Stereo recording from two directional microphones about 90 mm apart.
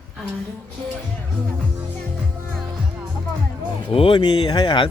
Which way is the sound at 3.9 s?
80° left.